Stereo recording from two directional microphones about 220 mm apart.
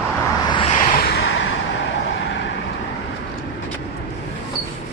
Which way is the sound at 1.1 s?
60° left (ahead or behind).